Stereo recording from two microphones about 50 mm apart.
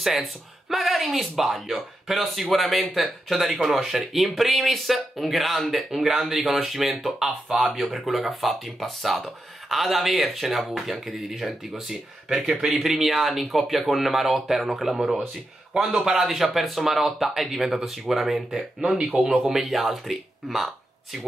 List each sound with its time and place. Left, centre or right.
0.0 s a man's voice: centre
18.8 s speech: centre